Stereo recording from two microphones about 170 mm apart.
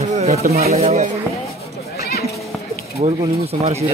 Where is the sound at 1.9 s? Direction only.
65° left (ahead or behind).